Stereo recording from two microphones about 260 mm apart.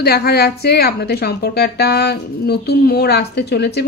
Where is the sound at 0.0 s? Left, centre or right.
Left.